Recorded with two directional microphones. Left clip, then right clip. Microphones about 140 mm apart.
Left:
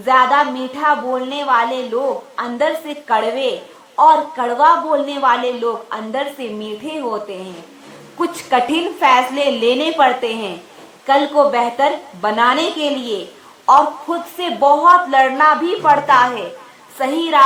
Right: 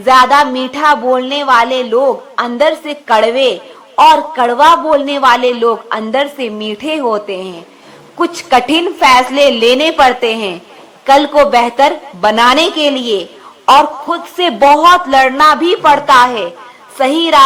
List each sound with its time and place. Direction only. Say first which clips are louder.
0.0 s a woman's voice: right 6 dB; 35° right (ahead or behind)
12.7 s a woman's voice: right 7 dB; 30° right (ahead or behind)